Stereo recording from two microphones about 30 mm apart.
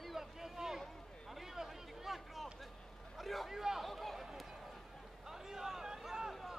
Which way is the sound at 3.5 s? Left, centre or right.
Centre.